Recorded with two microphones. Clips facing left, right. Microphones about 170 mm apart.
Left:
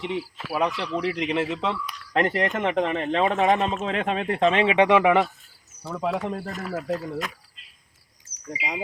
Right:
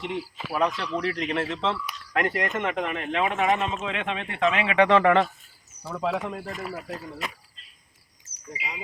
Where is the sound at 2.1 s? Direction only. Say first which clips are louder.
Left 3 dB; 30° left (ahead or behind); by 5.2 s 10° left (ahead or behind).